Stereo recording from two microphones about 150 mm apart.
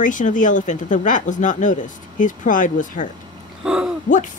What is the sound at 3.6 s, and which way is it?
Speech, 5° right (ahead or behind).